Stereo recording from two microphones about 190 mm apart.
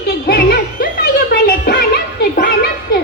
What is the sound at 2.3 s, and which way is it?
Music, 45° left (ahead or behind).